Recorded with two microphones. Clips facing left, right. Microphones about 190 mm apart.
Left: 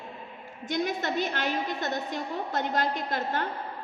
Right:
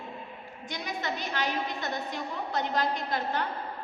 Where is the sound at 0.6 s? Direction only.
50° left (ahead or behind).